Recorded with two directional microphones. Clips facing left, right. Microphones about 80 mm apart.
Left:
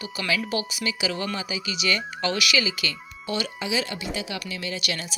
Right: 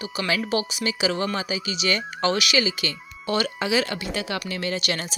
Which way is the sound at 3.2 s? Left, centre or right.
Right.